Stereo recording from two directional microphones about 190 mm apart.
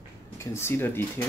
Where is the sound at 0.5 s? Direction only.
10° left (ahead or behind).